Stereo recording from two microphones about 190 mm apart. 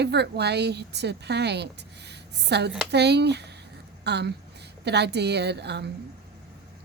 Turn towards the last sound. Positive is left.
turn(degrees=-65)  # may be behind; listen again after turning